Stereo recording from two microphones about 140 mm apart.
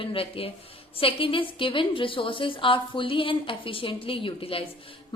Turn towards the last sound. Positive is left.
turn(degrees=40)  # may be behind; listen again after turning